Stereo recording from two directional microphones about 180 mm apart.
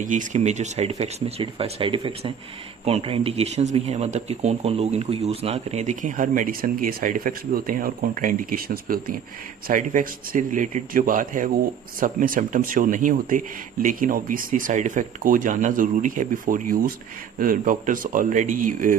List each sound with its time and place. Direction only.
0.0 s speech: 45° right (ahead or behind)